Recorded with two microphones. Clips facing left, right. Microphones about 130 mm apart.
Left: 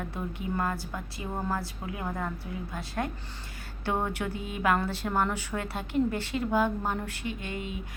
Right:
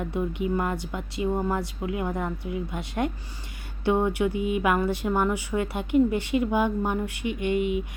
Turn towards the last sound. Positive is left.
turn(degrees=-15)  # may be behind; listen again after turning